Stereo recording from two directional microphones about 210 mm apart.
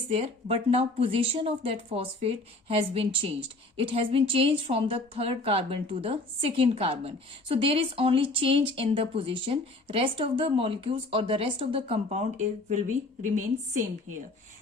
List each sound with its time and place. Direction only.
0.1 s a woman's voice: 30° right (ahead or behind)